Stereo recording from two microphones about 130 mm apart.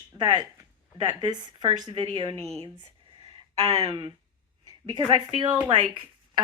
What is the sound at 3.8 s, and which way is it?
Speech, 40° right (ahead or behind).